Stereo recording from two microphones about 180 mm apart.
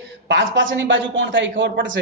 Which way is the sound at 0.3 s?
85° right.